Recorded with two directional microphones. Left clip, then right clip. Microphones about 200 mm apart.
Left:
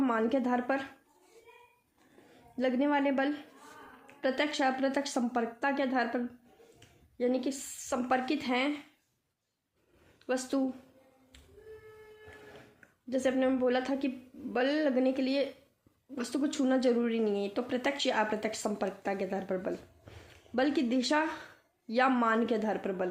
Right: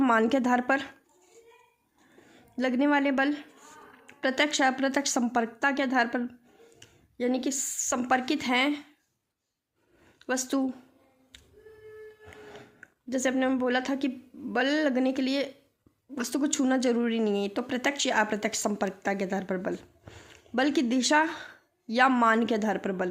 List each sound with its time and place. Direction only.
0.0 s speech: 45° right (ahead or behind)
2.3 s a woman's voice: 40° right (ahead or behind)
10.2 s a woman's voice: 40° right (ahead or behind)
12.3 s a sound: 40° right (ahead or behind)
14.5 s speech: 40° right (ahead or behind)